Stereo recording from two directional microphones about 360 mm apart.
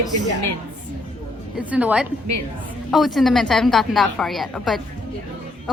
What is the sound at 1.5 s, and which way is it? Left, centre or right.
Speech, centre.